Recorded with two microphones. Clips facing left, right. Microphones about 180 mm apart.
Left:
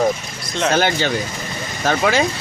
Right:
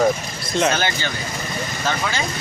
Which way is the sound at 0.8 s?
70° left (ahead or behind).